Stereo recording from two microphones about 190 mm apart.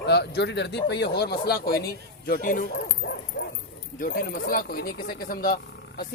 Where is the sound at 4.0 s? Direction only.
50° left (ahead or behind).